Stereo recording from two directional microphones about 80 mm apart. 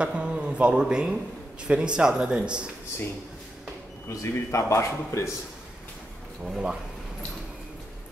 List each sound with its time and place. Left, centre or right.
0.0 s a man's voice: centre
4.1 s a man's voice: left
6.4 s a man's voice: centre